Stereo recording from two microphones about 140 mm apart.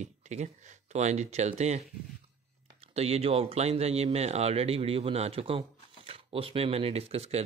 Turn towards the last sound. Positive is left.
turn(degrees=-45)  # may be behind; listen again after turning